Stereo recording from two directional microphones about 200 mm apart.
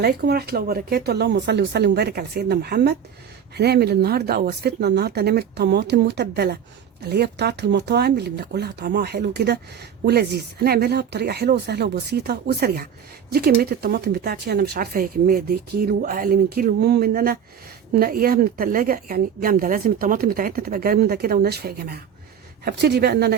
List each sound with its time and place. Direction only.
0.0 s a woman's voice: 55° right (ahead or behind)